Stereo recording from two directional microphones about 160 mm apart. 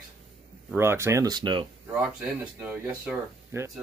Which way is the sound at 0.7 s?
15° right (ahead or behind).